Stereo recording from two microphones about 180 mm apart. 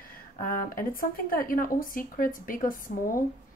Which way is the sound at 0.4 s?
50° left (ahead or behind).